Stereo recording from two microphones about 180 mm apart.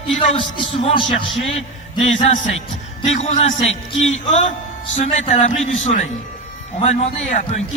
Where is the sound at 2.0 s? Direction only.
40° left (ahead or behind).